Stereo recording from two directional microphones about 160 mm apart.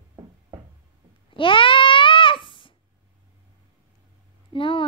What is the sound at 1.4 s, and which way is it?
Babbling, 35° left (ahead or behind).